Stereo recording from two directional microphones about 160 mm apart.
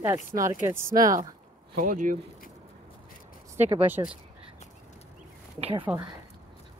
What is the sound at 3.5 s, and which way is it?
Speech, 45° right (ahead or behind).